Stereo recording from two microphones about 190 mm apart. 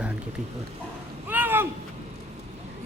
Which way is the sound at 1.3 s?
10° right (ahead or behind).